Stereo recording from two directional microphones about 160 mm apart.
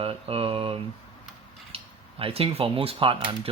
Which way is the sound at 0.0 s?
35° right (ahead or behind).